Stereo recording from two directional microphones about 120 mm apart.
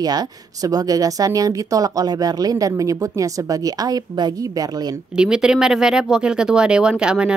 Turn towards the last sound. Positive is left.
turn(degrees=-5)  # may be behind; listen again after turning